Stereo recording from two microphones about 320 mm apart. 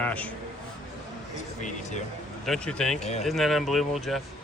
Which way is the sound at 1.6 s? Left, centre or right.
Left.